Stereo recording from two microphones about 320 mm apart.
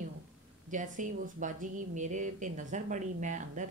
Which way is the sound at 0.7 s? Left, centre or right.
Right.